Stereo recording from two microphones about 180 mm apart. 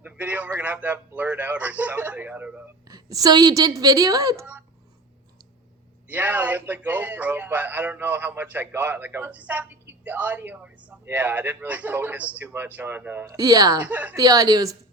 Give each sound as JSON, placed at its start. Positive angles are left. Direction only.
{"t": 0.0, "sound": "a man's voice", "side_deg": -10}
{"t": 2.8, "sound": "a woman's voice", "side_deg": -20}
{"t": 6.1, "sound": "a man's voice", "side_deg": -10}
{"t": 13.8, "sound": "a man's voice", "side_deg": -10}
{"t": 14.2, "sound": "a woman's voice", "side_deg": -20}